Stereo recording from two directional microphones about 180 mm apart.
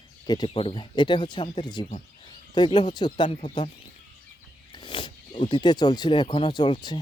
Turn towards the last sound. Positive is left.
turn(degrees=25)  # may be behind; listen again after turning